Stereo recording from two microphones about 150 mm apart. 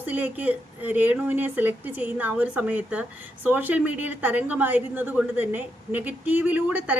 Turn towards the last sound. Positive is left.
turn(degrees=-10)  # may be behind; listen again after turning